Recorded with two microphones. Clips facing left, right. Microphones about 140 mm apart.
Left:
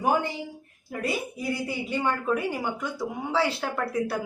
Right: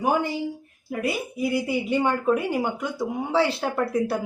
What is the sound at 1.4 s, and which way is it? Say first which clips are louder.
Speech: right 6 dB; 15° right (ahead or behind).